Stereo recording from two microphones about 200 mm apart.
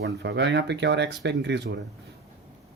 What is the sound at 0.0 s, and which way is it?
Speech, 60° right (ahead or behind).